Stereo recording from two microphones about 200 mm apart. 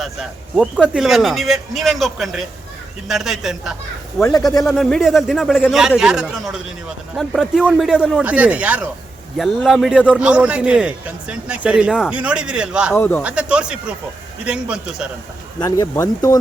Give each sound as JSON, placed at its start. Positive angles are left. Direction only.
{"t": 0.0, "sound": "a man's voice", "side_deg": 0}
{"t": 13.0, "sound": "speech", "side_deg": 10}
{"t": 13.2, "sound": "a man's voice", "side_deg": -5}
{"t": 15.6, "sound": "speech", "side_deg": 15}